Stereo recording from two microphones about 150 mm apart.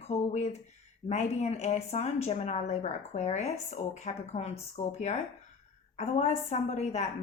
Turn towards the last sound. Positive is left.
turn(degrees=50)  # may be behind; listen again after turning